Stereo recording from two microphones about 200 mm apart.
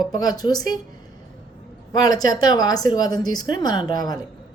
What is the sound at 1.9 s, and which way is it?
A woman's voice, 20° left (ahead or behind).